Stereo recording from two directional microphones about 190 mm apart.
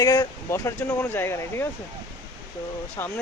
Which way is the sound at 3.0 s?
10° left (ahead or behind).